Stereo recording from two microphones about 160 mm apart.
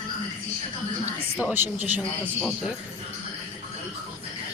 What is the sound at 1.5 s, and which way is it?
Speech, 10° right (ahead or behind).